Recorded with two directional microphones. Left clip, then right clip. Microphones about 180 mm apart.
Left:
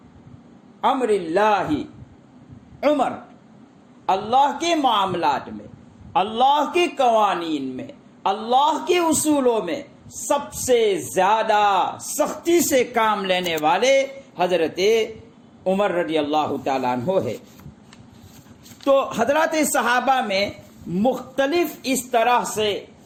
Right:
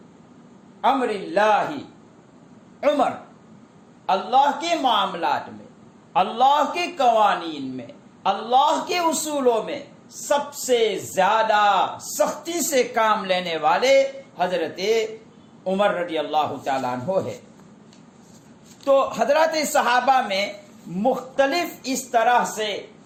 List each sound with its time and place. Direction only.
0.8 s speech: 40° left (ahead or behind)
4.0 s speech: 40° left (ahead or behind)
18.9 s speech: 30° left (ahead or behind)